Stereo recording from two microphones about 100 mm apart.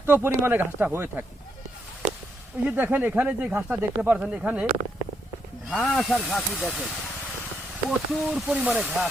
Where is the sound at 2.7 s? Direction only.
20° right (ahead or behind).